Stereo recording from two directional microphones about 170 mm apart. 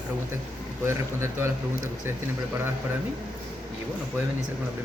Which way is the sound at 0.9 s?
15° right (ahead or behind).